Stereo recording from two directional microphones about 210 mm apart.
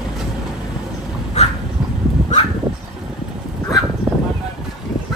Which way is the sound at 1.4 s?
30° left (ahead or behind).